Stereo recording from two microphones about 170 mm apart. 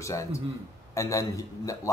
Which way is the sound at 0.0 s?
20° left (ahead or behind).